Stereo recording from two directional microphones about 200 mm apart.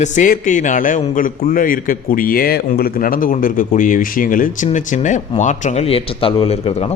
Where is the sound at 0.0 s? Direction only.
40° left (ahead or behind).